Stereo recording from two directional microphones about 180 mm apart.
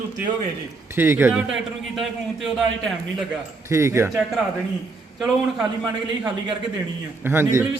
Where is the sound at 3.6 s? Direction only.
15° right (ahead or behind).